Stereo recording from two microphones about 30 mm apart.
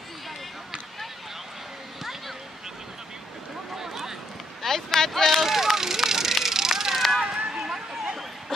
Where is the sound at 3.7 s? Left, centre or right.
Centre.